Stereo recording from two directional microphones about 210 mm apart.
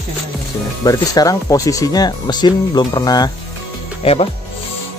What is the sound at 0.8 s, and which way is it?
Speech, 15° left (ahead or behind).